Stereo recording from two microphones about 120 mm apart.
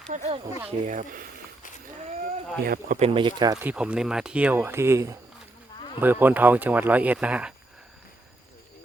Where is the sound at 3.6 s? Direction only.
10° right (ahead or behind).